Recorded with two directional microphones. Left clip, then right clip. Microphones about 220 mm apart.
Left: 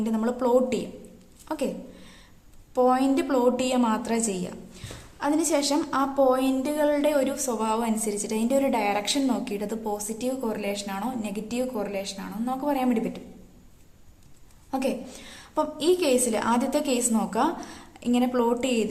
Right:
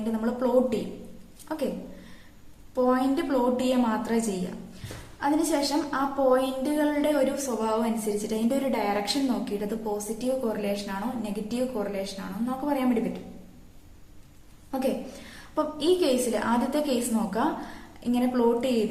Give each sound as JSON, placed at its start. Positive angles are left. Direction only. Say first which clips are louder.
{"t": 0.2, "sound": "a woman's voice", "louder": "left 1 dB", "side_deg": 45}
{"t": 2.7, "sound": "a woman's voice", "louder": "left 3 dB", "side_deg": 45}
{"t": 15.5, "sound": "a woman's voice", "louder": "left 1 dB", "side_deg": 45}